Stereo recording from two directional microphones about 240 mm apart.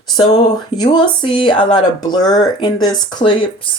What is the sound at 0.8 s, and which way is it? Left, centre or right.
Speech, centre.